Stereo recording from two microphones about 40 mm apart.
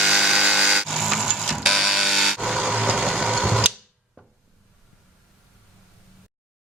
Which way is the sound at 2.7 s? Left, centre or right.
Right.